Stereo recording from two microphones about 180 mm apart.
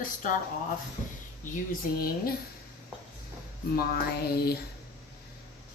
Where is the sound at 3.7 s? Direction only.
60° left (ahead or behind).